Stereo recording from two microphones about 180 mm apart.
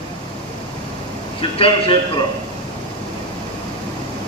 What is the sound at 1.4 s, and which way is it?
Speech, 30° left (ahead or behind).